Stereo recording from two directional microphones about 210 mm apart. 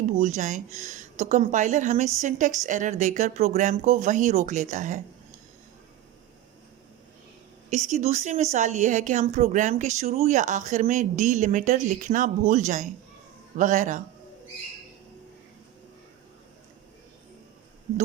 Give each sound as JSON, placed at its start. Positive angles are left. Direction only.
{"t": 0.0, "sound": "speech", "side_deg": -35}
{"t": 7.7, "sound": "speech", "side_deg": -35}